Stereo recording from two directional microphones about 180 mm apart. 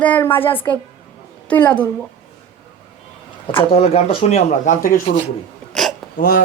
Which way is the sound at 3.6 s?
35° left (ahead or behind).